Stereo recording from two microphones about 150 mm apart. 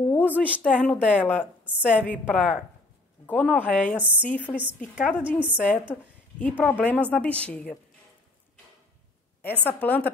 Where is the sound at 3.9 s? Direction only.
10° right (ahead or behind).